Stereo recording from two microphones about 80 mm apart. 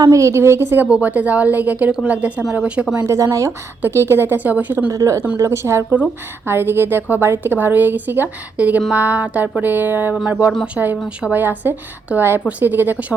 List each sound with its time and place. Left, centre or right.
0.1 s a woman's voice: right
0.9 s a woman's voice: centre
3.1 s a woman's voice: right
3.8 s a woman's voice: right
4.9 s a woman's voice: right
10.8 s a woman's voice: centre
11.3 s a woman's voice: right